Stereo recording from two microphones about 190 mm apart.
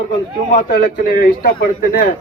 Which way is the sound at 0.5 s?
45° left (ahead or behind).